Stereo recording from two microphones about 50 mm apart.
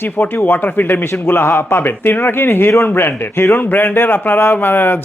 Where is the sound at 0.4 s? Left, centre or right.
Left.